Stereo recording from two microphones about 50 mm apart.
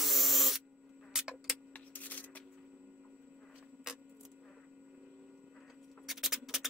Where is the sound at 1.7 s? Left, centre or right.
Left.